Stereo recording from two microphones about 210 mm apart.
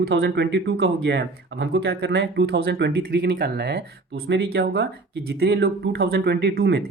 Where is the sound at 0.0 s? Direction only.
55° right (ahead or behind).